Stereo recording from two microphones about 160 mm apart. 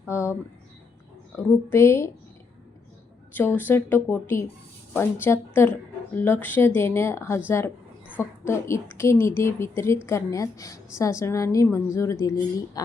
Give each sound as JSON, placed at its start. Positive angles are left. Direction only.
{"t": 0.1, "sound": "speech", "side_deg": 15}
{"t": 1.4, "sound": "a woman's voice", "side_deg": 15}
{"t": 3.3, "sound": "a woman's voice", "side_deg": 10}